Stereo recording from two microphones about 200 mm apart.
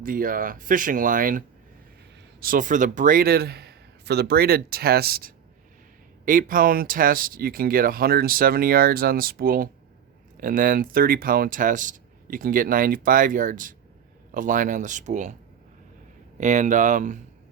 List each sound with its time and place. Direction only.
0.0 s speech: 45° right (ahead or behind)
16.4 s speech: 40° right (ahead or behind)